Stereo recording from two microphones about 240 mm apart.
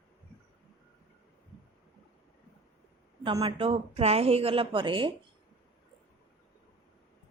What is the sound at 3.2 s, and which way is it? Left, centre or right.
Speech, centre.